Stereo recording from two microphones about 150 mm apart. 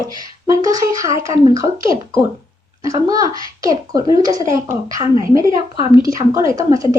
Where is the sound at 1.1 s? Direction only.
35° left (ahead or behind).